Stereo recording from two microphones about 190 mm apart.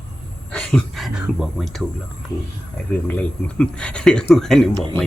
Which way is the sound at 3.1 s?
5° left (ahead or behind).